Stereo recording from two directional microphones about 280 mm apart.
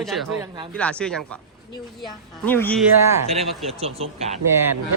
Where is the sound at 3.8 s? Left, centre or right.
Right.